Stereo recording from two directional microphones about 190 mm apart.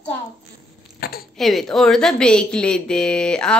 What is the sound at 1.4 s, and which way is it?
A woman's voice, centre (ahead or behind).